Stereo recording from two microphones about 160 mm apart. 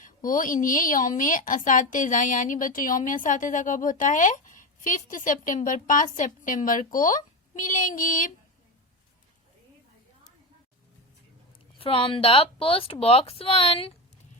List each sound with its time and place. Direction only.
0.0 s a woman's voice: 55° left (ahead or behind)
7.5 s child singing: 55° left (ahead or behind)
11.8 s a woman's voice: 35° left (ahead or behind)